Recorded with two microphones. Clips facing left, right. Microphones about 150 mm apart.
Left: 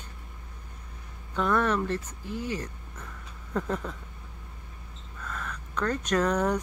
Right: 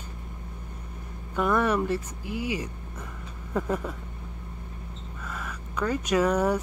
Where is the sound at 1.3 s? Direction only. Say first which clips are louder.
Right 2 dB; 10° right (ahead or behind).